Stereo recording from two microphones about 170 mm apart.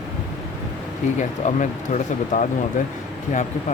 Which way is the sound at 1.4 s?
45° left (ahead or behind).